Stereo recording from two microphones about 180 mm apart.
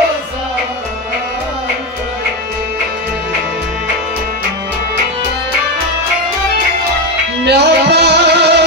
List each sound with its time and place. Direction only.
7.4 s music: 65° right (ahead or behind)